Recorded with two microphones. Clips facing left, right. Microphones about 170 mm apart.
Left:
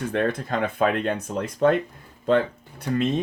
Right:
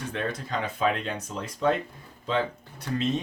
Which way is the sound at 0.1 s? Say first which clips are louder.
Left 6 dB; 55° left (ahead or behind).